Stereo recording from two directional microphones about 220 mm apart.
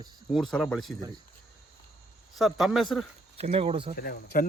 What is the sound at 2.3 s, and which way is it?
Speech, centre (ahead or behind).